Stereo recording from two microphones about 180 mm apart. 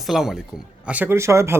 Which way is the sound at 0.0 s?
Centre (ahead or behind).